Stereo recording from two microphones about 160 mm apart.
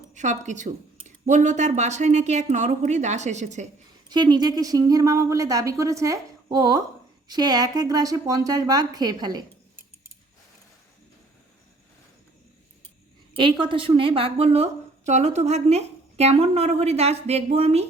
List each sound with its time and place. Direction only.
0.1 s a woman's voice: 50° right (ahead or behind)
4.1 s a woman's voice: 25° right (ahead or behind)
13.3 s a woman's voice: 30° right (ahead or behind)